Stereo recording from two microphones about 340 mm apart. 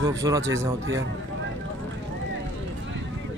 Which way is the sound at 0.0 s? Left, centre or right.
Centre.